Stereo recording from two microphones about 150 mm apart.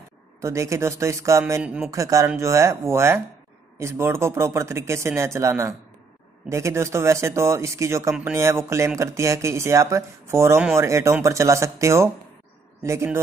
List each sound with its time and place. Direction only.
0.4 s speech: 20° right (ahead or behind)
1.6 s speech: 5° right (ahead or behind)
1.9 s speech: 20° right (ahead or behind)